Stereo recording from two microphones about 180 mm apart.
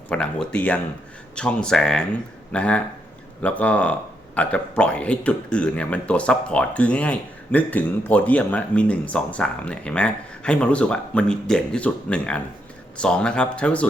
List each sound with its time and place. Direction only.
0.1 s a man's voice: 5° left (ahead or behind)